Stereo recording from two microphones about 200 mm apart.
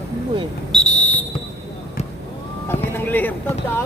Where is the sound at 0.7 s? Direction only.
5° left (ahead or behind).